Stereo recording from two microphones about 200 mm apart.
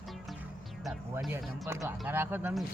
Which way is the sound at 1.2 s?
Centre (ahead or behind).